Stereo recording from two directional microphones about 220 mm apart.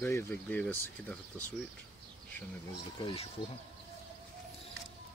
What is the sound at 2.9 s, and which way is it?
Speech, 25° left (ahead or behind).